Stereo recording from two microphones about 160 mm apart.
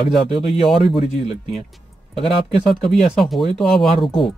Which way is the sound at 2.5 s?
Centre (ahead or behind).